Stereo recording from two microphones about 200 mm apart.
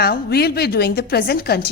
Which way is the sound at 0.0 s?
50° left (ahead or behind).